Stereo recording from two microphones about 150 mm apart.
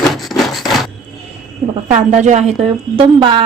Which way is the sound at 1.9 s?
50° right (ahead or behind).